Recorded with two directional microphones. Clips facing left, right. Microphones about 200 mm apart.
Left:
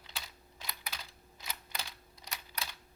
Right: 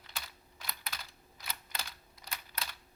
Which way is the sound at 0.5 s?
15° left (ahead or behind).